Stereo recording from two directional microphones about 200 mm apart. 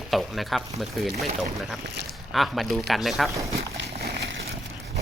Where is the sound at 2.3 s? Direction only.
Centre (ahead or behind).